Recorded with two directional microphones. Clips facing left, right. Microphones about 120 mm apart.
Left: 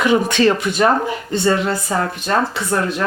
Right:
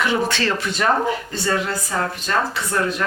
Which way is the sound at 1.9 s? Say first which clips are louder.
Left 2 dB; 35° left (ahead or behind).